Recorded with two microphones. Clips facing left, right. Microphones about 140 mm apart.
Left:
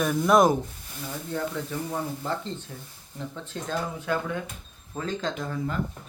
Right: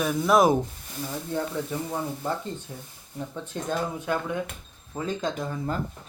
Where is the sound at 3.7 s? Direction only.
15° right (ahead or behind).